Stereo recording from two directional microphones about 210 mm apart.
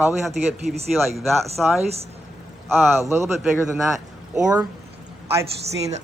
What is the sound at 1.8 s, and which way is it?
Speech, 30° right (ahead or behind).